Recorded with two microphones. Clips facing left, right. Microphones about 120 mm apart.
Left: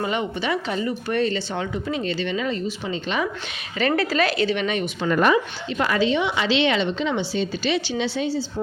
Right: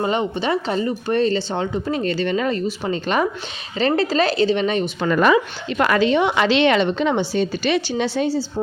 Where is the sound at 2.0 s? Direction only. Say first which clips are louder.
Right 5 dB; 45° right (ahead or behind).